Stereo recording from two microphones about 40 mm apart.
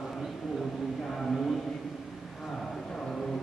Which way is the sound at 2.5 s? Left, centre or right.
Centre.